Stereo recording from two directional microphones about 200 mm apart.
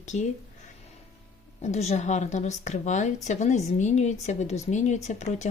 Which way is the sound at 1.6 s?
35° left (ahead or behind).